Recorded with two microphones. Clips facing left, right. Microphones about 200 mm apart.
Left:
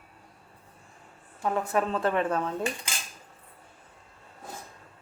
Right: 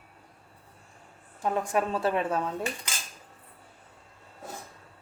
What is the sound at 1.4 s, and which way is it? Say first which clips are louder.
A woman's voice: even; 20° right (ahead or behind).